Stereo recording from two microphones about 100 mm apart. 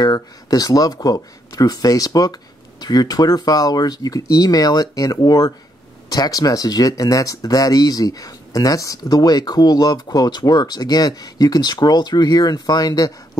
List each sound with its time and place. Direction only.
0.0 s speech: 40° left (ahead or behind)